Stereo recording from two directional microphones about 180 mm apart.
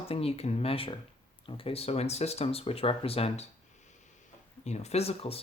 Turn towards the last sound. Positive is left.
turn(degrees=35)  # may be behind; listen again after turning